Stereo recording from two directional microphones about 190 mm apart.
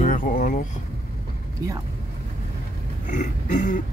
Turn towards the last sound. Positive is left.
turn(degrees=40)  # may be behind; listen again after turning